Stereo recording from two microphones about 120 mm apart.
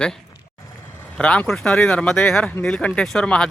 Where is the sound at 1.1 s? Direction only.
10° left (ahead or behind).